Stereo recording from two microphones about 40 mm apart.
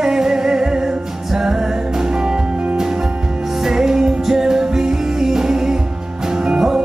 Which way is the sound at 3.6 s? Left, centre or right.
Centre.